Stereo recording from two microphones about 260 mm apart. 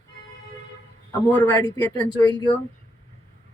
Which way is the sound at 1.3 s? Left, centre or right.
Centre.